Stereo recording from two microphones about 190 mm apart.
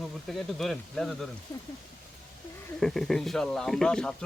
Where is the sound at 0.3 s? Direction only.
Centre (ahead or behind).